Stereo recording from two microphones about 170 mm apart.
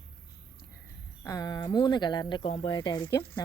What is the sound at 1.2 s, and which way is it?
A woman's voice, 20° left (ahead or behind).